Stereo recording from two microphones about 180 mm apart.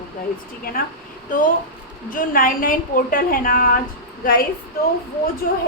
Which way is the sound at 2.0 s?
50° left (ahead or behind).